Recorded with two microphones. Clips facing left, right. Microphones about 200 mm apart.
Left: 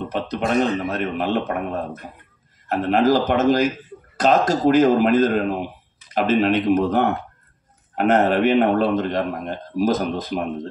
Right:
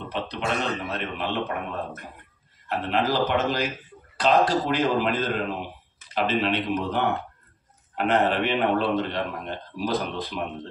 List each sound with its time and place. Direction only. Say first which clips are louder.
0.1 s a man's voice: left 6 dB; 45° left (ahead or behind)